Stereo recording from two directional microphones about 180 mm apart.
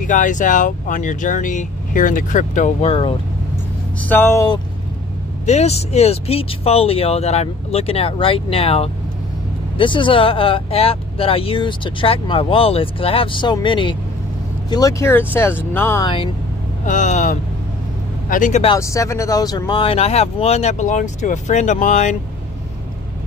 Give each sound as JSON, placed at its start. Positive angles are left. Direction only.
{"t": 0.0, "sound": "speech", "side_deg": 45}
{"t": 4.0, "sound": "speech", "side_deg": 10}
{"t": 5.4, "sound": "speech", "side_deg": 40}
{"t": 16.0, "sound": "speech", "side_deg": 25}
{"t": 16.8, "sound": "speech", "side_deg": 45}
{"t": 18.8, "sound": "speech", "side_deg": 15}